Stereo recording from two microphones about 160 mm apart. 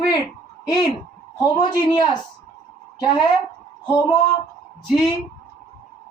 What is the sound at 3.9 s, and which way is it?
Speech, 20° left (ahead or behind).